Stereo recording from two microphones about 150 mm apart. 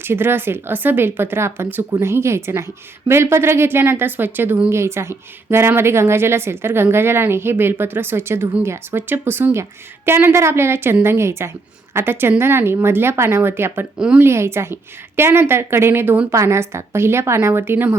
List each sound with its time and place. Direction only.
0.0 s a woman's voice: 15° right (ahead or behind)